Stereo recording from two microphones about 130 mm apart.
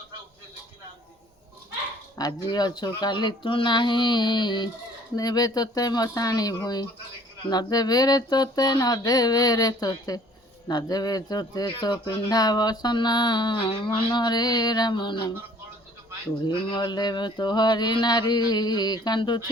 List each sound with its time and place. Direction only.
2.1 s speech: 30° left (ahead or behind)
5.1 s mantra: 30° left (ahead or behind)
10.7 s speech: 30° left (ahead or behind)
16.5 s speech: 40° left (ahead or behind)